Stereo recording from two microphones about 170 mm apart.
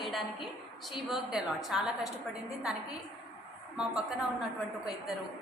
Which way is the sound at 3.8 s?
5° right (ahead or behind).